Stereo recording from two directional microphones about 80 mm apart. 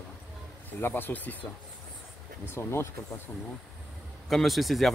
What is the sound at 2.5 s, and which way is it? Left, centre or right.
Speech, left.